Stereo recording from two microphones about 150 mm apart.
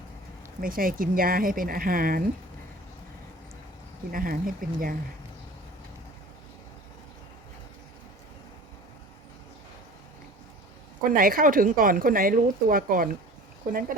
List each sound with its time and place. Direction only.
0.6 s a woman's voice: 70° right (ahead or behind)
4.1 s a woman's voice: 70° right (ahead or behind)
11.0 s a woman's voice: 70° right (ahead or behind)